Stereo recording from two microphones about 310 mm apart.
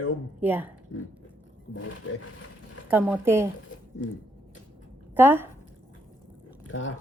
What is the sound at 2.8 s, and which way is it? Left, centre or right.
Speech, centre.